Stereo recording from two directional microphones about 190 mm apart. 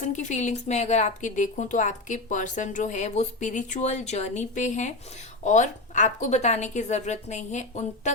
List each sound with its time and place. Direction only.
0.0 s a woman's voice: 40° left (ahead or behind)